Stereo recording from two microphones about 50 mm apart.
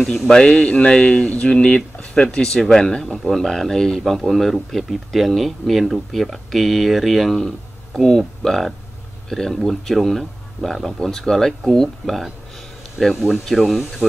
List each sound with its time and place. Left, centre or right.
0.3 s speech: centre
8.4 s speech: centre